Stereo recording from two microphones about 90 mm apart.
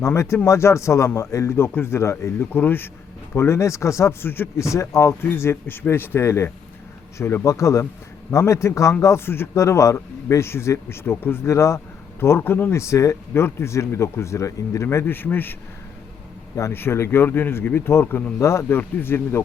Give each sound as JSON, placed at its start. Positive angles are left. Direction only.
{"t": 0.0, "sound": "a man's voice", "side_deg": 30}
{"t": 16.6, "sound": "a man's voice", "side_deg": 30}